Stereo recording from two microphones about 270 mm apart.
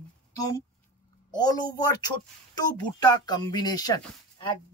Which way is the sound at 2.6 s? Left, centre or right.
Centre.